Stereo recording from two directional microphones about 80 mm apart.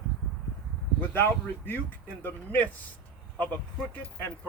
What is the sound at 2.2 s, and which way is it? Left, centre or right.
Speech, left.